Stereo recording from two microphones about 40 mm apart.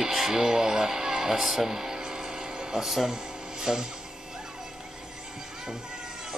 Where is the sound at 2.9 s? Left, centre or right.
Centre.